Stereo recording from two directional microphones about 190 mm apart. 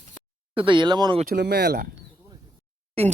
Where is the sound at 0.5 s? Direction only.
25° right (ahead or behind).